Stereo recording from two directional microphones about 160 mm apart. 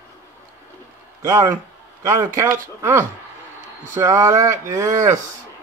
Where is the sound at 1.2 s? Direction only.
15° right (ahead or behind).